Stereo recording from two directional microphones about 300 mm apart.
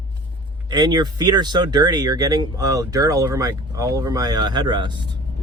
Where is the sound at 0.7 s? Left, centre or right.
Centre.